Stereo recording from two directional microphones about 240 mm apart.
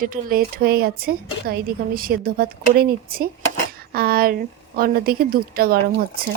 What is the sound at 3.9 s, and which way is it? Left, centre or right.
Speech, right.